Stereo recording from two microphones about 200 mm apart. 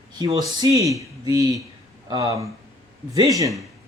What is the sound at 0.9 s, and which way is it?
Speech, 15° right (ahead or behind).